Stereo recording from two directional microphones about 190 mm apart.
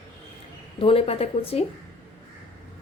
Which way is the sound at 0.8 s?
30° left (ahead or behind).